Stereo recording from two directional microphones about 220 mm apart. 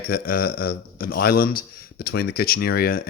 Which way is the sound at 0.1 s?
40° left (ahead or behind).